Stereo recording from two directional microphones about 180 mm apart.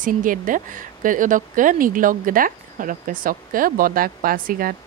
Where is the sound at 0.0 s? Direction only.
50° right (ahead or behind).